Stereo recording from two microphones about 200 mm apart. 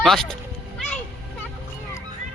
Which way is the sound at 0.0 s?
Centre (ahead or behind).